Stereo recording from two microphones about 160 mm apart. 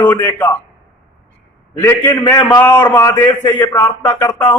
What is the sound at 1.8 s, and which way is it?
A man's voice, 15° left (ahead or behind).